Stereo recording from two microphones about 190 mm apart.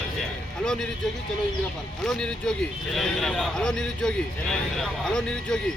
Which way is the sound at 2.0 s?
5° left (ahead or behind).